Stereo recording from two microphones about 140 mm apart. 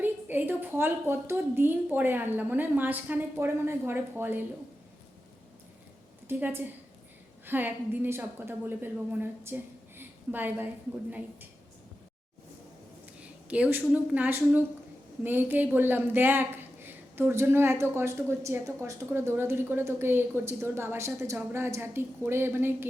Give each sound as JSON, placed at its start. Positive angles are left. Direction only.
{"t": 0.0, "sound": "speech", "side_deg": -15}
{"t": 6.2, "sound": "a woman's voice", "side_deg": -15}
{"t": 10.0, "sound": "a sound", "side_deg": -15}
{"t": 13.5, "sound": "speech", "side_deg": -10}